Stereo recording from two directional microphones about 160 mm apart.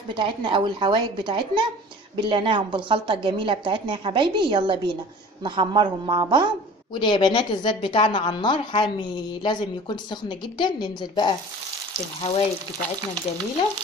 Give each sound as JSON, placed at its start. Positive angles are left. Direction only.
{"t": 0.1, "sound": "a woman's voice", "side_deg": -30}
{"t": 6.9, "sound": "a woman's voice", "side_deg": 30}